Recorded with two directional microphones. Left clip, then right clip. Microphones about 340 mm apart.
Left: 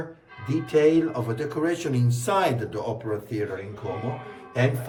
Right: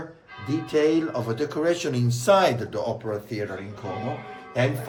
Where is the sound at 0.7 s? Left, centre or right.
Centre.